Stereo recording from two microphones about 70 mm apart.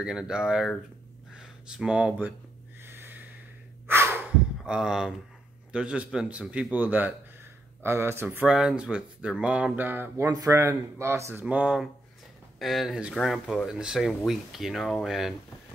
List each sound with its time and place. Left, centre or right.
0.0 s speech: centre
1.3 s a sound: centre
2.8 s a sound: right
3.8 s breathing: right
4.6 s speech: centre
7.8 s speech: right
8.5 s speech: centre
9.8 s speech: right
10.3 s speech: right
10.6 s speech: right
11.4 s speech: centre